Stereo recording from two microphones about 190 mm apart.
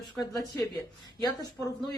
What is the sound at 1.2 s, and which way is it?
Speech, 20° left (ahead or behind).